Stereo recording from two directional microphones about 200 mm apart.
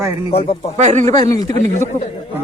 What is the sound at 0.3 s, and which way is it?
Speech, 30° left (ahead or behind).